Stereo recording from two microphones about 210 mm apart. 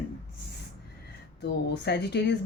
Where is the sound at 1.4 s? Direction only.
50° left (ahead or behind).